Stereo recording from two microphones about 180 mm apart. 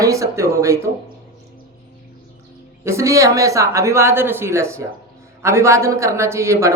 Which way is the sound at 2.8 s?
15° right (ahead or behind).